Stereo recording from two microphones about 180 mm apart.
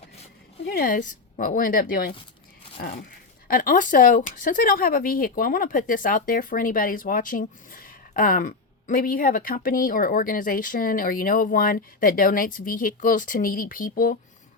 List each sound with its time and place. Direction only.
0.6 s speech: 55° left (ahead or behind)
3.5 s speech: 50° left (ahead or behind)